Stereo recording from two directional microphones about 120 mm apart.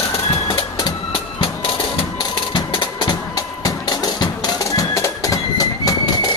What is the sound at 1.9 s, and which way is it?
Music, 45° left (ahead or behind).